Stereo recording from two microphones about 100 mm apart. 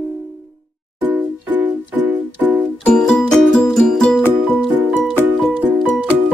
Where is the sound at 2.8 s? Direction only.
10° left (ahead or behind).